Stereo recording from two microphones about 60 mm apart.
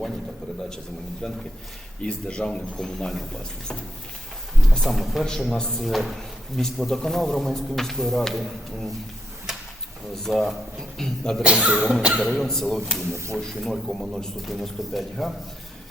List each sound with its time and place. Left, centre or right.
1.2 s speech: centre
4.8 s speech: centre
5.8 s speech: centre
9.5 s a sound: centre
10.2 s speech: centre
11.4 s speech: centre
12.2 s speech: centre